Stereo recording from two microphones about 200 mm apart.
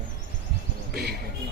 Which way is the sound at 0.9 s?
50° right (ahead or behind).